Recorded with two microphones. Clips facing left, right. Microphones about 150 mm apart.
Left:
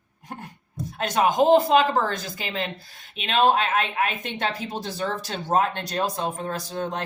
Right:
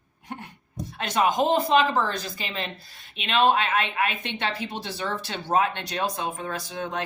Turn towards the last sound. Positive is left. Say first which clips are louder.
# left 3 dB
turn(degrees=40)  # may be behind; listen again after turning